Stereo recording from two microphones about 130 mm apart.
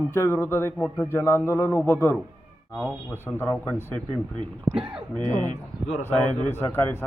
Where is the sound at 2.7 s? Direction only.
5° left (ahead or behind).